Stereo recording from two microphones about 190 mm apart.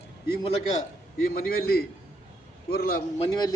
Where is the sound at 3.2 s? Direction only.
20° left (ahead or behind).